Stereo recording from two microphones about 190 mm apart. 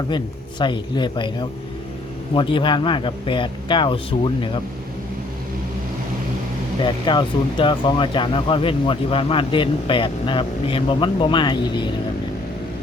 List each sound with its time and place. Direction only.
0.6 s speech: 25° left (ahead or behind)
6.8 s speech: 25° left (ahead or behind)